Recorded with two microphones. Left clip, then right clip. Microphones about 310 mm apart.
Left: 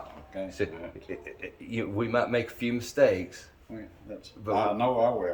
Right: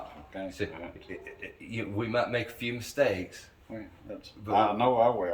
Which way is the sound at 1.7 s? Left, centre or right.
Centre.